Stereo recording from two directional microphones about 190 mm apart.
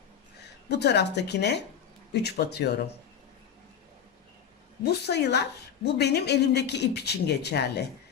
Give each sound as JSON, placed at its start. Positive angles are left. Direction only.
{"t": 0.4, "sound": "a woman's voice", "side_deg": 60}
{"t": 4.8, "sound": "a woman's voice", "side_deg": 60}